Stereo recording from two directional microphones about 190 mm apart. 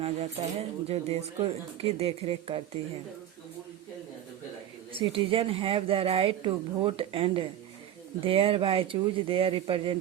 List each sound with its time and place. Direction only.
0.0 s speech: 35° right (ahead or behind)
4.9 s a woman's voice: 30° right (ahead or behind)